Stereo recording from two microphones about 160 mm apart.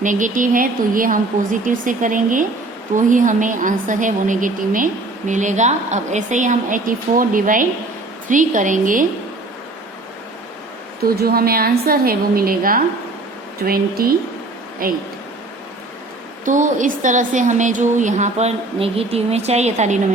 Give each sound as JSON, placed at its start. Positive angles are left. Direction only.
{"t": 0.0, "sound": "a woman's voice", "side_deg": -55}
{"t": 11.0, "sound": "a woman's voice", "side_deg": -75}
{"t": 16.5, "sound": "a woman's voice", "side_deg": -55}